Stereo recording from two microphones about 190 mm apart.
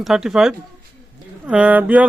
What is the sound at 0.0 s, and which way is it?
Speech, centre (ahead or behind).